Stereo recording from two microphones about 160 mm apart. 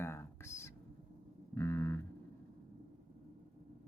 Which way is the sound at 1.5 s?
15° left (ahead or behind).